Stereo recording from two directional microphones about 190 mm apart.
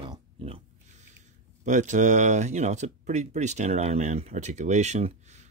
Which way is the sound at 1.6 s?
40° right (ahead or behind).